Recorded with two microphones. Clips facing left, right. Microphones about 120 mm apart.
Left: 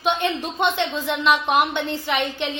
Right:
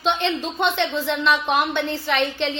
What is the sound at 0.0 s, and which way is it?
A woman's voice, 15° left (ahead or behind).